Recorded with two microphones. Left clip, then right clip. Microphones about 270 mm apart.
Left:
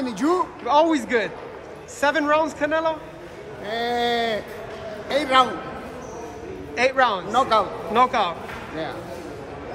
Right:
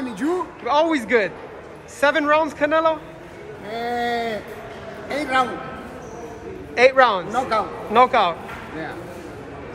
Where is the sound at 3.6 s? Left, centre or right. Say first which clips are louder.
Left 1 dB; left.